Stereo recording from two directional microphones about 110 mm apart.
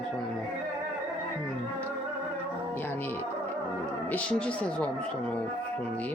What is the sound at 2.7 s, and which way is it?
Music, 20° left (ahead or behind).